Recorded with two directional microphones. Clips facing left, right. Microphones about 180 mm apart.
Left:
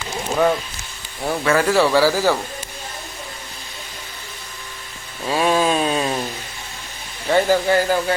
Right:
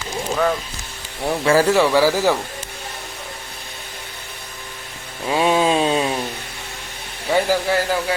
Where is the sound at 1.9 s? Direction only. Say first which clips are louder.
Even; 15° right (ahead or behind).